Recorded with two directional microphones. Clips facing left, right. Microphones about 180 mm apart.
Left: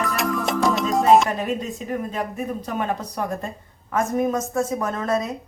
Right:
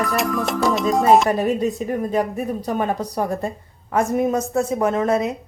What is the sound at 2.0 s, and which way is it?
A woman's voice, 40° right (ahead or behind).